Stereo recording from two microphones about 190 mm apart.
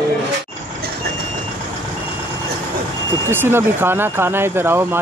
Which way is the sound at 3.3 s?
10° right (ahead or behind).